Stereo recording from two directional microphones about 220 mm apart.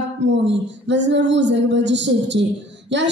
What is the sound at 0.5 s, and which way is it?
A woman's voice, 55° right (ahead or behind).